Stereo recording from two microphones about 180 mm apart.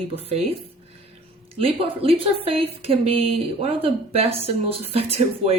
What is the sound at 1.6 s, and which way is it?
Speech, 30° right (ahead or behind).